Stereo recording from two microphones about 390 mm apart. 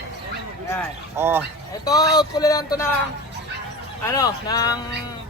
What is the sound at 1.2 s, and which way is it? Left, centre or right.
Speech, centre.